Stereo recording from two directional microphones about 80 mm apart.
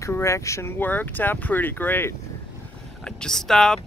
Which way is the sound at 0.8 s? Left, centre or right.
Left.